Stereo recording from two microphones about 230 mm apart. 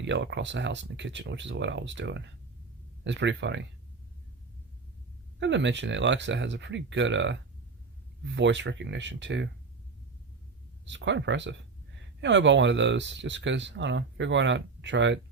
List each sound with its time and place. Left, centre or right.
0.0 s speech: right
5.4 s speech: right
10.8 s speech: right